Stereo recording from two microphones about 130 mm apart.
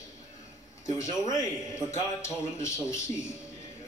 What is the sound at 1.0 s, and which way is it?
A man's voice, 25° left (ahead or behind).